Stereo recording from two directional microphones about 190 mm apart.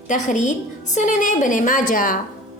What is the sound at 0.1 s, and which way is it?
A woman's voice, 40° left (ahead or behind).